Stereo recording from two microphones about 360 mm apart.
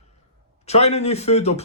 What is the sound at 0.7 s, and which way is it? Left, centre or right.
Speech, centre.